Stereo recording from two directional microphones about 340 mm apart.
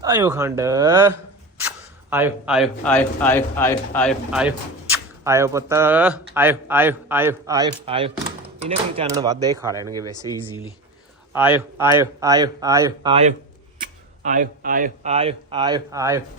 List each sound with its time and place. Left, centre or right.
0.0 s speech: centre
11.3 s speech: centre